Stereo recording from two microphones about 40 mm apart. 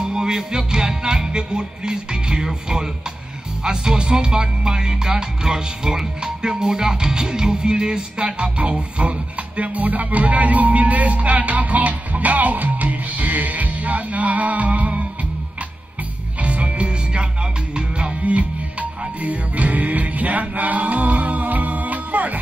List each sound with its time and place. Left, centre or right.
0.0 s music: centre
9.6 s music: right
16.4 s music: right
18.2 s music: right